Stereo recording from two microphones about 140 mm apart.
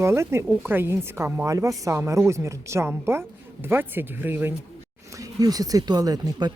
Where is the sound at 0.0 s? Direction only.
20° right (ahead or behind).